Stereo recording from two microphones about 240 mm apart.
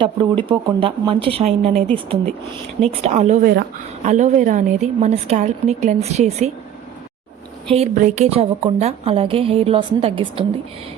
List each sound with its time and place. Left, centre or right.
0.0 s a woman's voice: right
2.8 s a woman's voice: right
7.7 s a woman's voice: right